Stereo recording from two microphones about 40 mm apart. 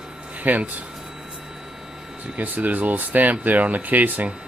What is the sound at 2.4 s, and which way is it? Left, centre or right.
Speech, right.